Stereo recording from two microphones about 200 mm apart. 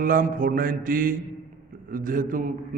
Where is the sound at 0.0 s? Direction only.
45° right (ahead or behind).